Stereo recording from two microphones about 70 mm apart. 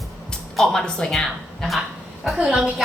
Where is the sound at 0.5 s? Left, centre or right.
Centre.